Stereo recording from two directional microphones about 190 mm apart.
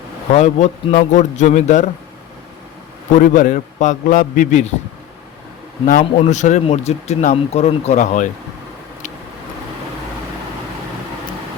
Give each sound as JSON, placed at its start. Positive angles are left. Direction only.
{"t": 0.3, "sound": "speech", "side_deg": 40}
{"t": 3.2, "sound": "speech", "side_deg": 40}
{"t": 5.8, "sound": "speech", "side_deg": 45}